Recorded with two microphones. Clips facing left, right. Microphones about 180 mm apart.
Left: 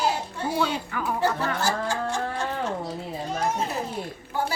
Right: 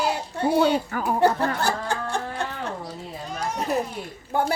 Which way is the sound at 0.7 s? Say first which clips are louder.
Right 4 dB; 40° right (ahead or behind).